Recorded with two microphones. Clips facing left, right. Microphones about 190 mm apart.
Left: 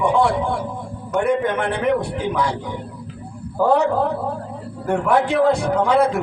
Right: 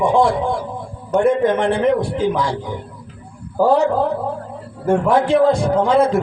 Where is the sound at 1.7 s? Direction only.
65° left (ahead or behind).